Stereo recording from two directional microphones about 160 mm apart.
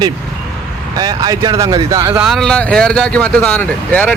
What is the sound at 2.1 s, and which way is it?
Speech, 5° right (ahead or behind).